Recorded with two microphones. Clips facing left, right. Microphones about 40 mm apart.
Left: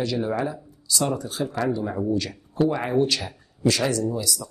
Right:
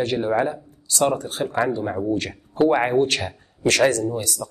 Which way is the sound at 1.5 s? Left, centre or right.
Right.